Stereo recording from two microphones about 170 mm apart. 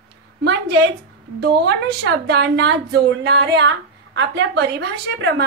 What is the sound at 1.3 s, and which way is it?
Speech, 75° right (ahead or behind).